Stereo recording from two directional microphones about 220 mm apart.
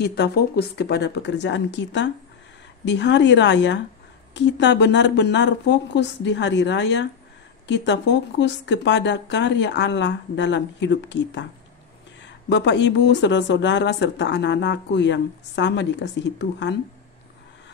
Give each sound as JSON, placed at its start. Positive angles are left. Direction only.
{"t": 0.0, "sound": "speech", "side_deg": 50}